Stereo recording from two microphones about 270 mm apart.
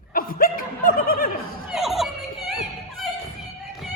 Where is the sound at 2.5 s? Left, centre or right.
Centre.